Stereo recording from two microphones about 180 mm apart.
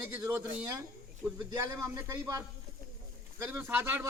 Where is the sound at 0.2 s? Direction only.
15° right (ahead or behind).